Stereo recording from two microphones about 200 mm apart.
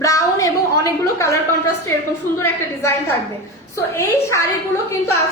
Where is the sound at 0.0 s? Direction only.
15° left (ahead or behind).